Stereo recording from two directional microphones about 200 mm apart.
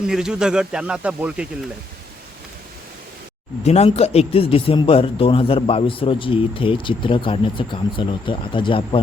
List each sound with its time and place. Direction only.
0.0 s speech: 5° right (ahead or behind)
3.6 s a man's voice: 30° left (ahead or behind)